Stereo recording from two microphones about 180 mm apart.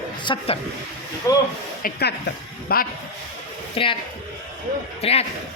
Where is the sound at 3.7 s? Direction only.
30° left (ahead or behind).